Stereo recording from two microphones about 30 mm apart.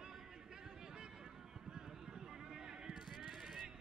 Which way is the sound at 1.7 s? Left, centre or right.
Right.